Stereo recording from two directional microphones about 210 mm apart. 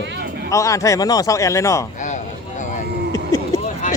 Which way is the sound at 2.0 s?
35° left (ahead or behind).